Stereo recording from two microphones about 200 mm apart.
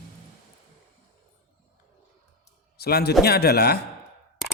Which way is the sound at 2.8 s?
50° left (ahead or behind).